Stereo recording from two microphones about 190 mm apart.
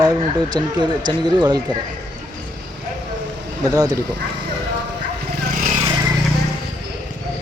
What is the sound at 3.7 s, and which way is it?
Speech, 20° right (ahead or behind).